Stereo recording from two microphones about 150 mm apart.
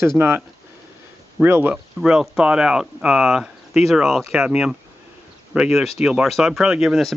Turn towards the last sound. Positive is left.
turn(degrees=0)  # may be behind; listen again after turning